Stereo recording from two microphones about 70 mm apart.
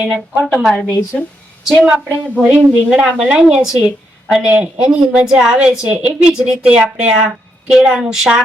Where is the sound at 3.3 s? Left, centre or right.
Centre.